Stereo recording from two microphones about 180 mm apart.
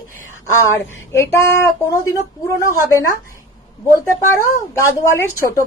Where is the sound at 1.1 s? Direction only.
15° left (ahead or behind).